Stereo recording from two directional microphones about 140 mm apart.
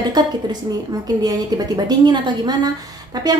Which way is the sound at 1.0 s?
25° right (ahead or behind).